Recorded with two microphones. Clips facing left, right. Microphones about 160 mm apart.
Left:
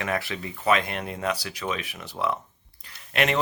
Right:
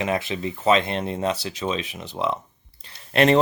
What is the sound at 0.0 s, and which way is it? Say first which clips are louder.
Speech: right 4 dB; 20° right (ahead or behind).